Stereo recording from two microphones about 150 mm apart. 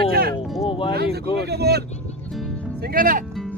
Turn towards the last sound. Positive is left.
turn(degrees=-70)  # may be behind; listen again after turning